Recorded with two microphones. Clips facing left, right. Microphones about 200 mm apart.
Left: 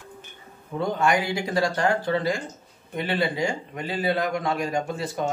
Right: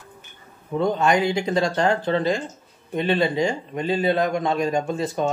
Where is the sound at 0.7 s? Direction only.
20° right (ahead or behind).